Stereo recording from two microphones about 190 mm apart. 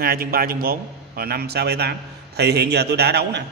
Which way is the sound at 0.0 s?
50° right (ahead or behind).